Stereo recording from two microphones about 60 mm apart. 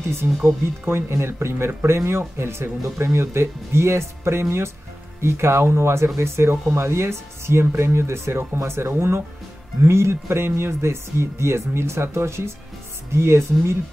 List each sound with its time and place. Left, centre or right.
0.1 s speech: right